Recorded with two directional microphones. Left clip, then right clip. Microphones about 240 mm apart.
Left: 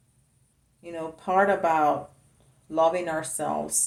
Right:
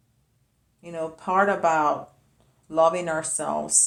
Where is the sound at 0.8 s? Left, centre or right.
Centre.